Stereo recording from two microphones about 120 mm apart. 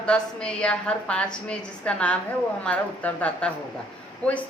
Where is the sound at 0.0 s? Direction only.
10° left (ahead or behind).